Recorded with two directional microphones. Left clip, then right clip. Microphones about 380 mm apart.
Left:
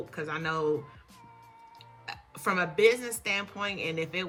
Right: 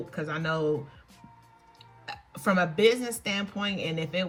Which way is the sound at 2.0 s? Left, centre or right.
Centre.